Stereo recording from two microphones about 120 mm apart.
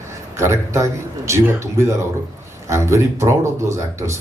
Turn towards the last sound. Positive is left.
turn(degrees=-25)  # may be behind; listen again after turning